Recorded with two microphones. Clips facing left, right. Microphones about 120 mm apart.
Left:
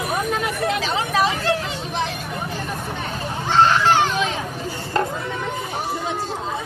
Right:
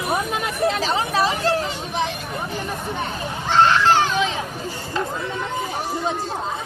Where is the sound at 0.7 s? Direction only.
35° right (ahead or behind).